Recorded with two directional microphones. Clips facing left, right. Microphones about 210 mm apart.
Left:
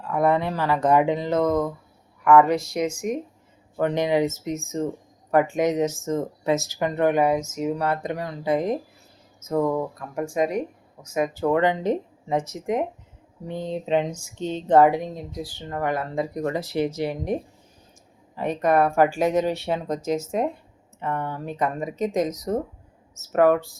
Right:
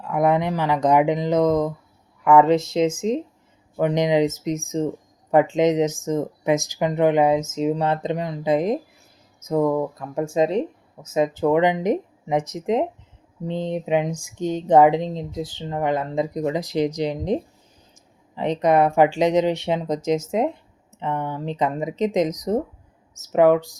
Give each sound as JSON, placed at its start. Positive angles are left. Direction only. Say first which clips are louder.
{"t": 0.0, "sound": "speech", "louder": "right 2 dB", "side_deg": -15}